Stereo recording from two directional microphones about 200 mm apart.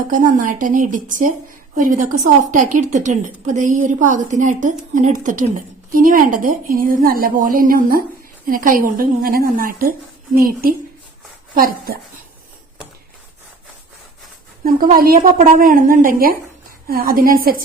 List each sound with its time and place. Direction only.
0.1 s a woman's voice: 40° right (ahead or behind)
14.6 s a woman's voice: 45° right (ahead or behind)